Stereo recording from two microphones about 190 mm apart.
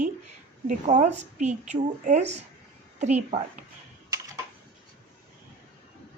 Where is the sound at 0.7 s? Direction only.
40° right (ahead or behind).